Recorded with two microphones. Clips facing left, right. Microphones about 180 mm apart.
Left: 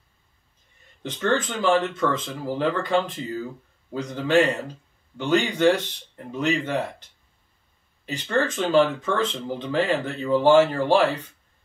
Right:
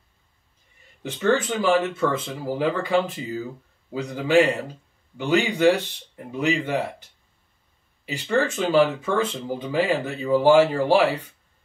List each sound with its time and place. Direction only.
1.0 s speech: 10° right (ahead or behind)
8.0 s speech: 10° right (ahead or behind)